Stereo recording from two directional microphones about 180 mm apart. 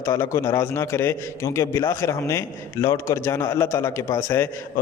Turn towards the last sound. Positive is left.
turn(degrees=15)  # may be behind; listen again after turning